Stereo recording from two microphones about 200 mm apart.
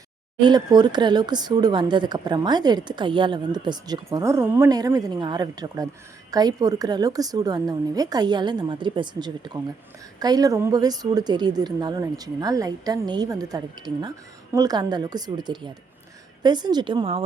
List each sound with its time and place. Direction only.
0.4 s speech: 20° right (ahead or behind)